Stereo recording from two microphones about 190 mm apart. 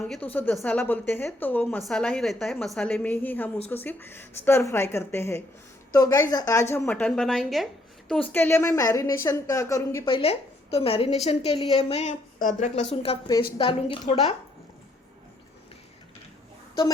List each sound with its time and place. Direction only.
0.1 s a woman's voice: 10° left (ahead or behind)
10.1 s a woman's voice: 30° left (ahead or behind)